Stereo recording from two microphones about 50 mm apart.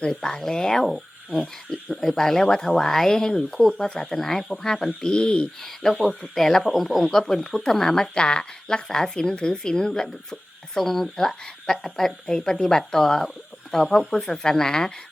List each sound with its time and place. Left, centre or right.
0.0 s speech: centre
0.9 s speech: centre
5.8 s speech: centre